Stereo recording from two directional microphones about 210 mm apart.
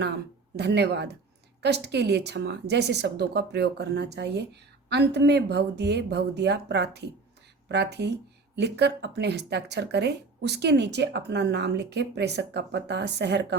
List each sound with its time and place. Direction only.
0.5 s speech: 55° right (ahead or behind)